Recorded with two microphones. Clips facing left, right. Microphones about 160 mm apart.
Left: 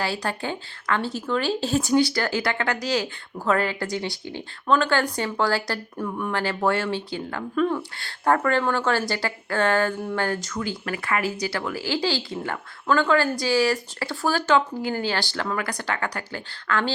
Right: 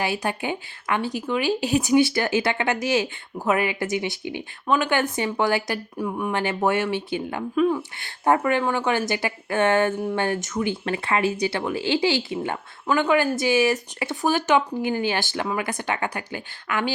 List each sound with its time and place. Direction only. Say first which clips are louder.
0.0 s speech: right 2 dB; 15° right (ahead or behind)
7.8 s speech: even; 20° right (ahead or behind)